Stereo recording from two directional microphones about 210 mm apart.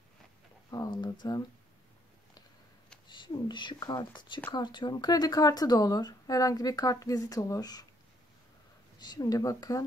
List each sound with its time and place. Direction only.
0.7 s a sound: 20° left (ahead or behind)
3.1 s speech: 20° left (ahead or behind)
8.9 s speech: 20° left (ahead or behind)